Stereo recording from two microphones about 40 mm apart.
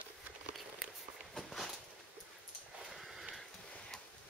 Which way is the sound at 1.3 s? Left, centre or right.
Centre.